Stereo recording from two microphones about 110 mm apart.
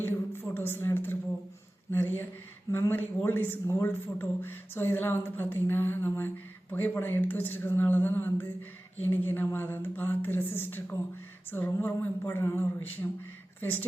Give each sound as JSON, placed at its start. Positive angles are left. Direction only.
{"t": 0.0, "sound": "a man's voice", "side_deg": 20}